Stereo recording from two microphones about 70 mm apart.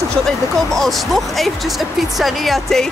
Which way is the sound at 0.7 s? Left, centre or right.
Centre.